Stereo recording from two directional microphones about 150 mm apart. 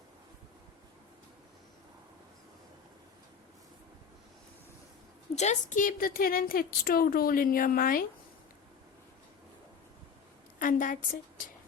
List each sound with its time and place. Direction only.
5.3 s a woman's voice: 50° left (ahead or behind); by 8.0 s 70° left (ahead or behind)
10.6 s a woman's voice: 65° left (ahead or behind)